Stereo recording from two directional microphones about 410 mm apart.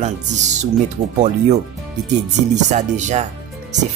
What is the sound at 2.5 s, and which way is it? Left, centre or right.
Speech, centre.